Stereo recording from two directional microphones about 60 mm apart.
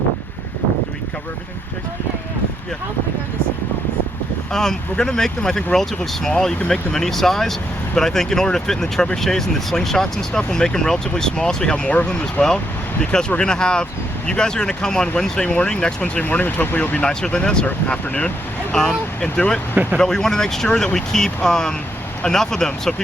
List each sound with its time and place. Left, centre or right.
4.5 s speech: centre
16.2 s speech: left
17.0 s speech: centre
19.7 s speech: right
20.0 s speech: centre